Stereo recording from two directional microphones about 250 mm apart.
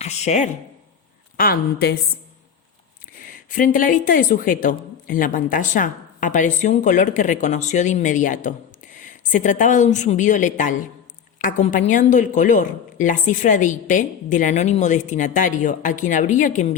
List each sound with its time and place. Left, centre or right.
0.0 s speech: left
1.4 s a woman's voice: left
3.1 s a woman's voice: left